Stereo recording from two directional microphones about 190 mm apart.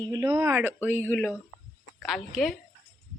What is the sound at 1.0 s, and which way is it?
Speech, 10° left (ahead or behind).